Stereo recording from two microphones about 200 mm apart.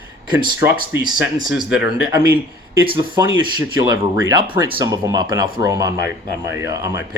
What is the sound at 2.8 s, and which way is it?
Speech, 25° right (ahead or behind).